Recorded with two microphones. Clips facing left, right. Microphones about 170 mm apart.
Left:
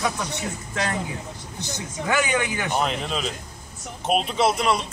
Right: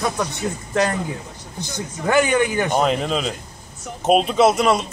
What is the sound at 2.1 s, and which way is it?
A man's voice, 45° right (ahead or behind).